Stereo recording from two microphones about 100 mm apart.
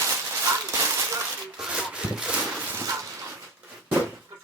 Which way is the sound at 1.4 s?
10° right (ahead or behind).